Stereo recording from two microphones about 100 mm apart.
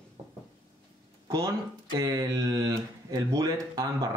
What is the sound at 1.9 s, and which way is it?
Speech, 40° right (ahead or behind).